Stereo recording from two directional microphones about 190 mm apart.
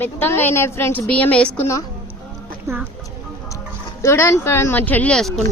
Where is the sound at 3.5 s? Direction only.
15° left (ahead or behind).